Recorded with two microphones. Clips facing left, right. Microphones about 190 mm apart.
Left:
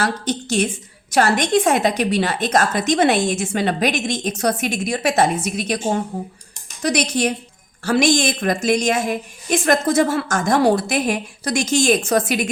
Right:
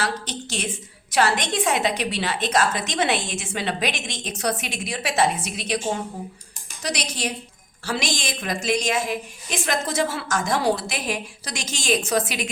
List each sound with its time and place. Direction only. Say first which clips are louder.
0.0 s a woman's voice: left 6 dB; 45° left (ahead or behind)